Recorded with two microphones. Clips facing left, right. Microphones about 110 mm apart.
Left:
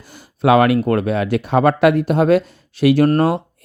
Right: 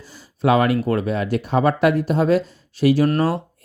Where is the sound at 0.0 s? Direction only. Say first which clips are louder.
Left 3 dB; 60° left (ahead or behind).